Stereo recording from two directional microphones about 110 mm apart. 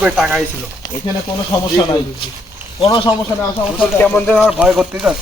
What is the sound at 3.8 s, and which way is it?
Speech, 15° left (ahead or behind).